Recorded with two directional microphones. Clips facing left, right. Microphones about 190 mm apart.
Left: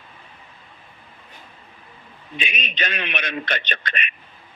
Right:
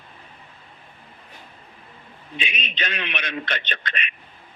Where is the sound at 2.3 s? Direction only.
50° left (ahead or behind).